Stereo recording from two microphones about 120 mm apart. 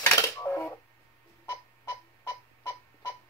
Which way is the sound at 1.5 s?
30° left (ahead or behind).